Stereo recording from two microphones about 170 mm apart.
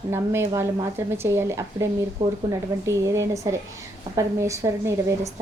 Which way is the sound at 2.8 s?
15° right (ahead or behind).